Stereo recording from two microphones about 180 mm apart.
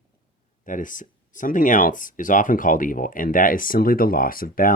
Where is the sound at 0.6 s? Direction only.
45° left (ahead or behind).